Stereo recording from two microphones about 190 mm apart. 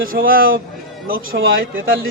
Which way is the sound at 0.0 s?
50° right (ahead or behind).